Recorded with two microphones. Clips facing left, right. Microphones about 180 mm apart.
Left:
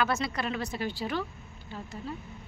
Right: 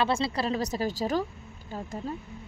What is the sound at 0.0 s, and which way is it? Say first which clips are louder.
A woman's voice: right 3 dB; 30° right (ahead or behind).